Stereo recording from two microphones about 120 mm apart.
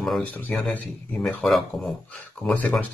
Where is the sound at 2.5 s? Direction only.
15° left (ahead or behind).